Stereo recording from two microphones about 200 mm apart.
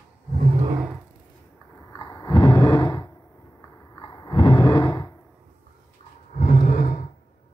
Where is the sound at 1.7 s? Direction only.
15° left (ahead or behind).